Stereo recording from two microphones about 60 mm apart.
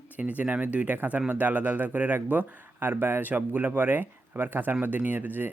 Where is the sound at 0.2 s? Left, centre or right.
Right.